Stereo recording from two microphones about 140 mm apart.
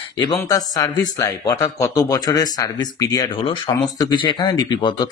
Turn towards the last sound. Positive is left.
turn(degrees=30)  # may be behind; listen again after turning